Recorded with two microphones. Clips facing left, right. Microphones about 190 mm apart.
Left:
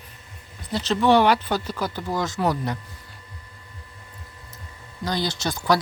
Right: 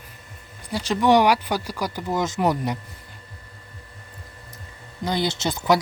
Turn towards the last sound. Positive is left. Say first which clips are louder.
# right 2 dB
turn(degrees=-20)  # may be behind; listen again after turning